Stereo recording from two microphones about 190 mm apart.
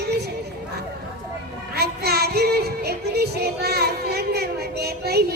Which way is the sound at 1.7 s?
55° right (ahead or behind).